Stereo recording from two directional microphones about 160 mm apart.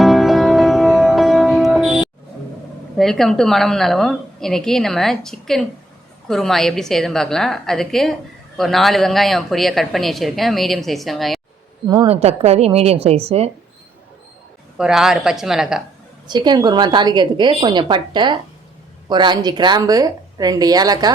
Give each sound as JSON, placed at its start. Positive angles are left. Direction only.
{"t": 0.0, "sound": "music", "side_deg": 0}
{"t": 3.0, "sound": "a woman's voice", "side_deg": 0}
{"t": 12.0, "sound": "a woman's voice", "side_deg": -40}
{"t": 14.8, "sound": "a woman's voice", "side_deg": -5}
{"t": 16.2, "sound": "a woman's voice", "side_deg": -25}